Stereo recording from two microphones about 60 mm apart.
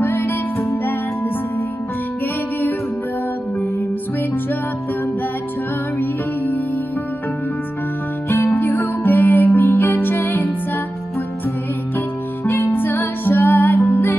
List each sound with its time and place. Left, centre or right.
0.0 s music: left
5.9 s music: left
8.5 s music: left
12.7 s music: left